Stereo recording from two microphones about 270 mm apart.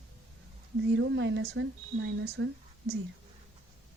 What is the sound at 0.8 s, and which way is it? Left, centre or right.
Speech, right.